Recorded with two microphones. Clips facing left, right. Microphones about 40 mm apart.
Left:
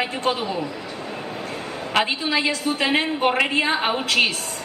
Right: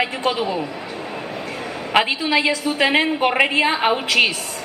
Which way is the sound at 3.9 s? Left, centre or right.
Right.